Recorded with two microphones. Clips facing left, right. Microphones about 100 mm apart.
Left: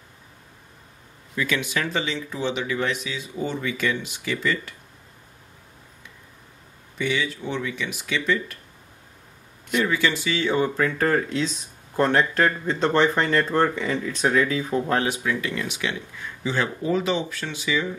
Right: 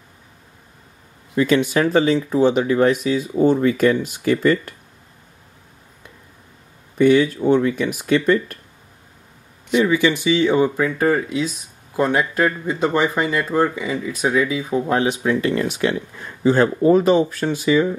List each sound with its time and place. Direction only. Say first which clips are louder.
1.3 s speech: right 9 dB; 35° right (ahead or behind)
7.0 s speech: right 12 dB; 50° right (ahead or behind)
9.7 s speech: right 6 dB; 10° right (ahead or behind)
15.2 s speech: right 8 dB; 40° right (ahead or behind)